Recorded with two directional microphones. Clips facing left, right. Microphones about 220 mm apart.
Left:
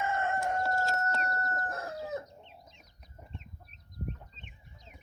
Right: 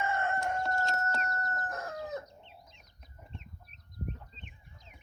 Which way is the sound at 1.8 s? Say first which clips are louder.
Left 1 dB; 15° left (ahead or behind).